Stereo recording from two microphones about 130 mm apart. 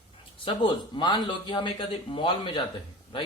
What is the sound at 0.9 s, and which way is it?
Speech, 35° left (ahead or behind).